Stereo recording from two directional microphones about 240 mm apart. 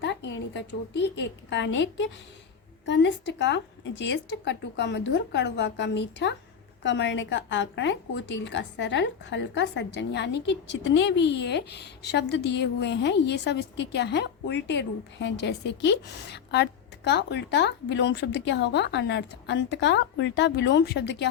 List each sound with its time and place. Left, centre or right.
0.0 s a woman's voice: left